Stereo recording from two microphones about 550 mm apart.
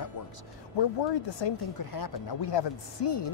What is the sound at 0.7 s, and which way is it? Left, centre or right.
Speech, left.